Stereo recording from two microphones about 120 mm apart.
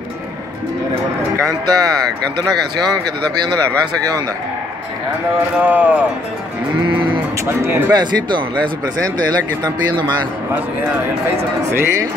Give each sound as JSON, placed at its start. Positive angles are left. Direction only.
{"t": 1.3, "sound": "speech", "side_deg": -30}
{"t": 5.6, "sound": "speech", "side_deg": -15}
{"t": 7.4, "sound": "a man's voice", "side_deg": -20}
{"t": 7.9, "sound": "speech", "side_deg": -40}
{"t": 11.2, "sound": "a man's voice", "side_deg": -20}